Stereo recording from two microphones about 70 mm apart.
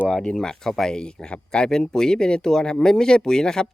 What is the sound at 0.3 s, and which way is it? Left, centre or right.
Speech, centre.